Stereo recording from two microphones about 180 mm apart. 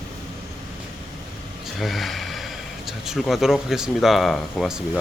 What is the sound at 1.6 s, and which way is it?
Gasp, centre (ahead or behind).